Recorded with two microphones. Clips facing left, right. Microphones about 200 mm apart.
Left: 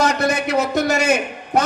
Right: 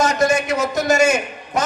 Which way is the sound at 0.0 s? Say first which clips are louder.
Right 1 dB; 60° left (ahead or behind).